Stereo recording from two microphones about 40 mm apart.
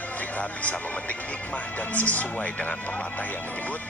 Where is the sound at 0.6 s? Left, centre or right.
Left.